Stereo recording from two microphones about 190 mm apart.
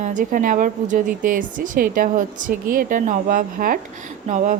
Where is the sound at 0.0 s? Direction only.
40° right (ahead or behind).